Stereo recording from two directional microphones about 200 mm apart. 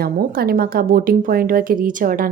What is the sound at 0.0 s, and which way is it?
A woman's voice, 50° right (ahead or behind).